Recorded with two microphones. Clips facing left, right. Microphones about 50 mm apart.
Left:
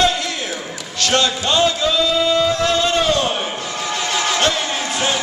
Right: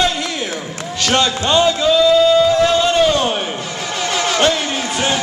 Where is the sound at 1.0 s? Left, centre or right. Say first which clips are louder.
Right 1 dB; centre.